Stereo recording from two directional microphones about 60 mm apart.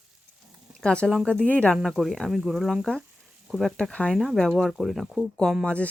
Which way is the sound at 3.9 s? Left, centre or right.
Centre.